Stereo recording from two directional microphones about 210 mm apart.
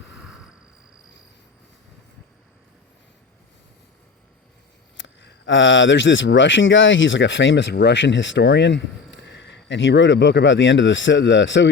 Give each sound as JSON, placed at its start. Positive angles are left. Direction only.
{"t": 4.9, "sound": "speech", "side_deg": 60}